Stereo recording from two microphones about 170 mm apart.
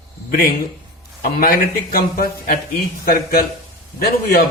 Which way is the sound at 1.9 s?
65° left (ahead or behind).